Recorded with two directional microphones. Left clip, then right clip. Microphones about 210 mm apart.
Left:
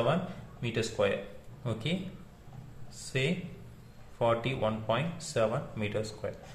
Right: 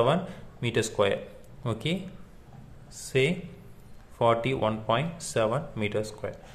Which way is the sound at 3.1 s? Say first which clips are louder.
Right 7 dB; 30° right (ahead or behind).